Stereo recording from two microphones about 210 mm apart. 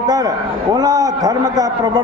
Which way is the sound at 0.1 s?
20° right (ahead or behind).